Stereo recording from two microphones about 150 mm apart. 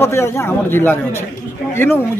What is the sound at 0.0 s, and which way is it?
A man's voice, 15° left (ahead or behind).